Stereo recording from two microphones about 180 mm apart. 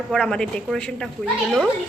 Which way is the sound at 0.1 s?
5° left (ahead or behind).